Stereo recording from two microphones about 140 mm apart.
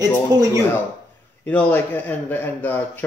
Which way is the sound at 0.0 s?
25° right (ahead or behind).